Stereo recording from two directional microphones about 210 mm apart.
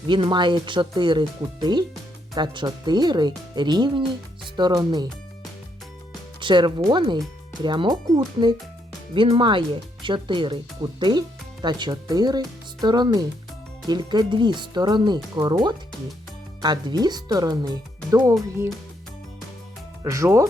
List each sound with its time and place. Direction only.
0.1 s speech: 20° right (ahead or behind)
6.4 s speech: 20° right (ahead or behind)
20.1 s speech: 15° right (ahead or behind)